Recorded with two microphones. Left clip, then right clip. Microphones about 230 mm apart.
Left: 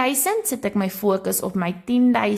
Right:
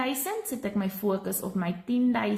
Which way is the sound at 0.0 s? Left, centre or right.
Left.